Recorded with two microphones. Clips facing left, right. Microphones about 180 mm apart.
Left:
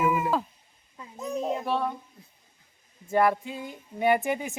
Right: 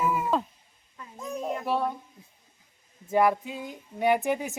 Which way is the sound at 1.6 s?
5° right (ahead or behind).